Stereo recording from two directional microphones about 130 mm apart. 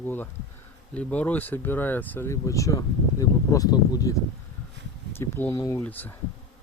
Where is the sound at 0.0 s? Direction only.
15° left (ahead or behind).